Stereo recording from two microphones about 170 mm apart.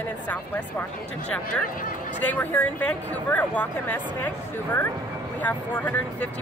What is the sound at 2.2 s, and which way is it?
Speech, 10° left (ahead or behind).